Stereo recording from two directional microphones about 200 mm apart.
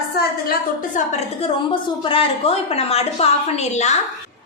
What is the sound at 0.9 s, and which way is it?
A woman's voice, 35° left (ahead or behind).